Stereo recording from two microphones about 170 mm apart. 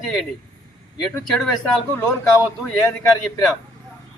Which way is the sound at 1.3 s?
5° left (ahead or behind).